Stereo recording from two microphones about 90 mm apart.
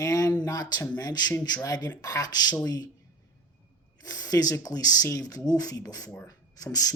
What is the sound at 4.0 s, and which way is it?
Speech, 45° left (ahead or behind).